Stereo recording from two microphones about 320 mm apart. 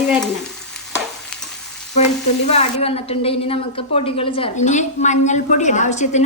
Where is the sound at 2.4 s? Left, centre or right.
Centre.